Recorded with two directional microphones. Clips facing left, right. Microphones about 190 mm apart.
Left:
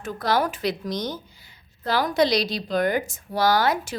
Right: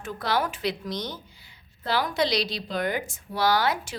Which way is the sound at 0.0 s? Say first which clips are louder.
Left 4 dB; 40° left (ahead or behind).